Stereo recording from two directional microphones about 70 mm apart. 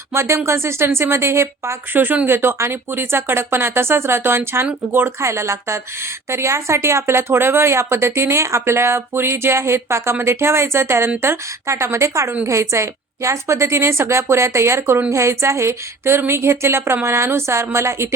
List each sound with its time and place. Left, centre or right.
0.1 s speech: right
1.9 s a woman's voice: right